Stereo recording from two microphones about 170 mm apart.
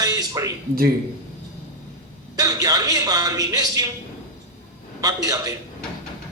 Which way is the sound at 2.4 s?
20° right (ahead or behind).